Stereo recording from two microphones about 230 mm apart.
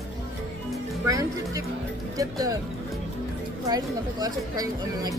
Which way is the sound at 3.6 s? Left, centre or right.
Centre.